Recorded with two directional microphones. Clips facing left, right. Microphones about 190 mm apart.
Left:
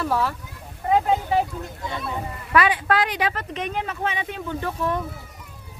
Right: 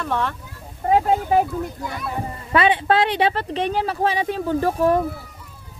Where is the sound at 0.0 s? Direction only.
5° left (ahead or behind).